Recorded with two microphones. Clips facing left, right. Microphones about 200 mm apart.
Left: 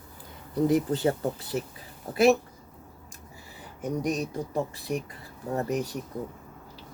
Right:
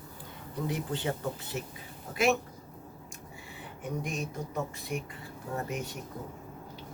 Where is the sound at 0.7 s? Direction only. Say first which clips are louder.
Left 8 dB; 40° left (ahead or behind).